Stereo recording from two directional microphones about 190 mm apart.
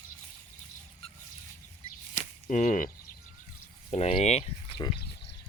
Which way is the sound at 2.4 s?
40° left (ahead or behind).